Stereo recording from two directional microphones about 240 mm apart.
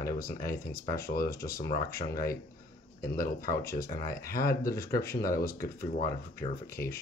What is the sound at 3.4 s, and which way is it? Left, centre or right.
Speech, centre.